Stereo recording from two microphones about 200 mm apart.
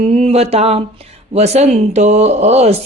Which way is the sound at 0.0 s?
30° right (ahead or behind).